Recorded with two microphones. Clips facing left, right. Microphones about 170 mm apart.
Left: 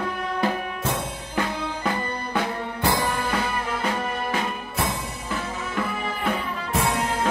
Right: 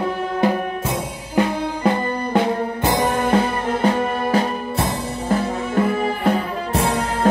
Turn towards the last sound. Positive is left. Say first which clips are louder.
# right 4 dB
turn(degrees=-35)  # may be behind; listen again after turning